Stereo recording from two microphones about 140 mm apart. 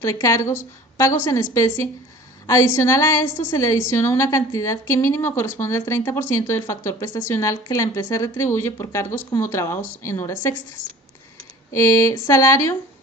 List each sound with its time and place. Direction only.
0.0 s a woman's voice: 25° left (ahead or behind)
11.7 s a woman's voice: 20° left (ahead or behind)